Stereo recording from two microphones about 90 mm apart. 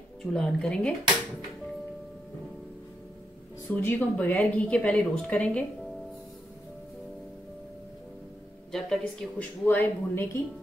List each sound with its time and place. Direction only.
0.2 s speech: 5° left (ahead or behind)
3.6 s a woman's voice: 20° left (ahead or behind)
8.7 s speech: 5° left (ahead or behind)
9.4 s a man's voice: 20° left (ahead or behind)